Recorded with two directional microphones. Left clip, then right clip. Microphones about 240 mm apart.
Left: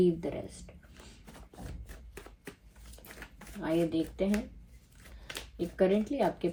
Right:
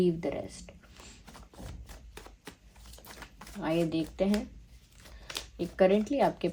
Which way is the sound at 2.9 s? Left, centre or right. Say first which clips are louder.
Right 1 dB; centre.